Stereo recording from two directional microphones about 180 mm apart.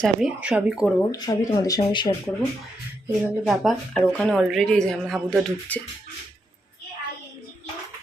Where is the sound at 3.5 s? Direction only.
Centre (ahead or behind).